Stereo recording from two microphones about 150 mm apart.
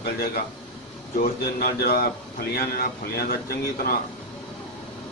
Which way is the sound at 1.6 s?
90° left.